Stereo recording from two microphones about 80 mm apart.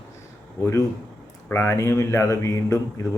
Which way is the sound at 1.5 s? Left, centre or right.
Left.